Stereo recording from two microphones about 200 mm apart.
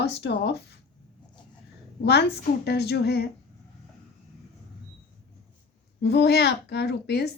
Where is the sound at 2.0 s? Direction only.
55° left (ahead or behind).